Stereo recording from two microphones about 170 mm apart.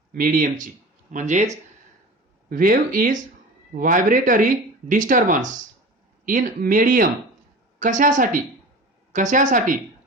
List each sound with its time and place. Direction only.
0.1 s speech: 55° right (ahead or behind)
2.5 s speech: 55° right (ahead or behind)